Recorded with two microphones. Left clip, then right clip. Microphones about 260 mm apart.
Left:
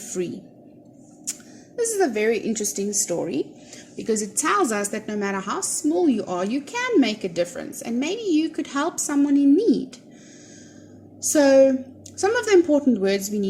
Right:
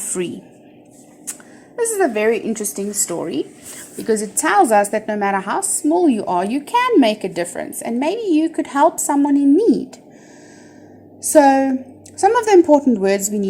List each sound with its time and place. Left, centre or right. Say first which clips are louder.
1.3 s a woman's voice: even; centre
11.2 s a woman's voice: right 3 dB; centre